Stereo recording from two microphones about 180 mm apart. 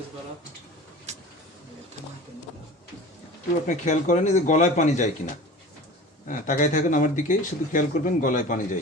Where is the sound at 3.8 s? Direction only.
40° left (ahead or behind).